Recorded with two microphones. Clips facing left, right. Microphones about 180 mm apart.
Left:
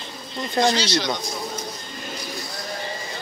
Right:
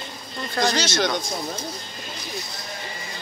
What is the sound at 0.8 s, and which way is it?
Speech, 45° right (ahead or behind).